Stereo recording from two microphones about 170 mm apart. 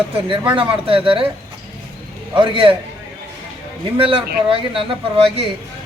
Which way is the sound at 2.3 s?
30° right (ahead or behind).